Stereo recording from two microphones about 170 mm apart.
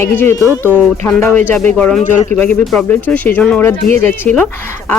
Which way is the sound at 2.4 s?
10° left (ahead or behind).